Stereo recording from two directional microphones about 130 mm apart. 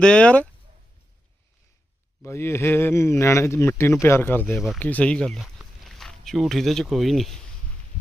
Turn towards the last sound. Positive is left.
turn(degrees=0)  # may be behind; listen again after turning